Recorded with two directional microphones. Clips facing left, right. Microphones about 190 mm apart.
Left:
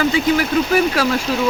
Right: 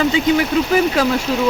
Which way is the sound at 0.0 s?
20° right (ahead or behind).